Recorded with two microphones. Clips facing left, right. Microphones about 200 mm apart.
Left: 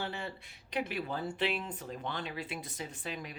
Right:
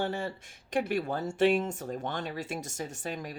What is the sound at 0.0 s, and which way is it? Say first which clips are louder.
Speech: right 7 dB; 45° right (ahead or behind).